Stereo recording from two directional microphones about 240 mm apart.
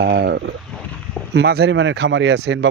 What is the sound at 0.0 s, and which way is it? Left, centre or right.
Speech, right.